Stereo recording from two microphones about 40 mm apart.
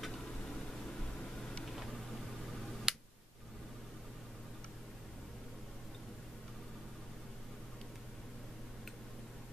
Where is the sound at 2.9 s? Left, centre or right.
Centre.